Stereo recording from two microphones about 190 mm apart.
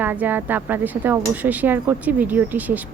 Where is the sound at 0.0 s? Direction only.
10° right (ahead or behind).